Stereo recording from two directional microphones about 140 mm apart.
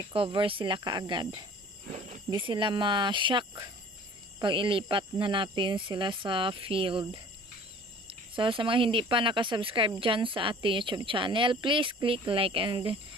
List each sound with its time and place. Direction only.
0.1 s speech: 40° right (ahead or behind)